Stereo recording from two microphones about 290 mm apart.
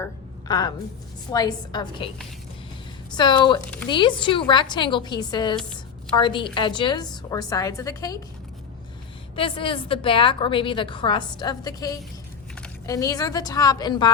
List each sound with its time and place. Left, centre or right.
0.0 s a sound: centre
1.3 s a woman's voice: centre
3.2 s a woman's voice: centre
9.3 s a woman's voice: centre